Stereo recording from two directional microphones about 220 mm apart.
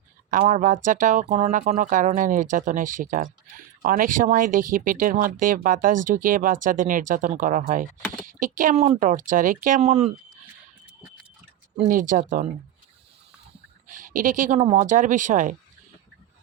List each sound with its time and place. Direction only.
0.3 s speech: 35° right (ahead or behind)
11.9 s speech: 40° right (ahead or behind)
13.8 s speech: 35° right (ahead or behind)